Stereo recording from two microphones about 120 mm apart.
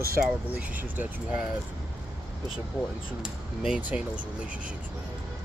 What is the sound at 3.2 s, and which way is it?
Speech, 5° right (ahead or behind).